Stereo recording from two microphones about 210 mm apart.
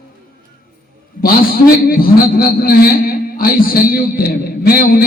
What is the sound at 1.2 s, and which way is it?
A man's voice, 45° left (ahead or behind).